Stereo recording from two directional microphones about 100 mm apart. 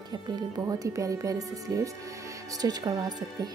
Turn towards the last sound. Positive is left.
turn(degrees=-40)  # may be behind; listen again after turning